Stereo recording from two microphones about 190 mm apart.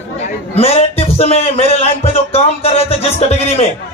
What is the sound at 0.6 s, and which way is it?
Speech, 30° left (ahead or behind).